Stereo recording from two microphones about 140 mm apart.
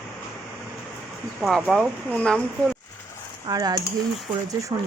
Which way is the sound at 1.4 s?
Centre (ahead or behind).